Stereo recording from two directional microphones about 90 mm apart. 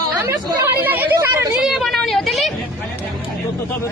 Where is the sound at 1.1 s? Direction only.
40° right (ahead or behind).